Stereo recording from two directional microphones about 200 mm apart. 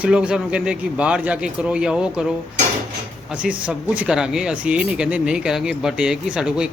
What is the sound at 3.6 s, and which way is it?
Speech, 5° right (ahead or behind).